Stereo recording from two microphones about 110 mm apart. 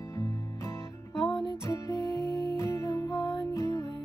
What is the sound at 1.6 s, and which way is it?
Music, 30° left (ahead or behind).